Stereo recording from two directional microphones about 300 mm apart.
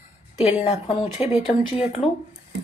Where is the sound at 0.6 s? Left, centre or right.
Left.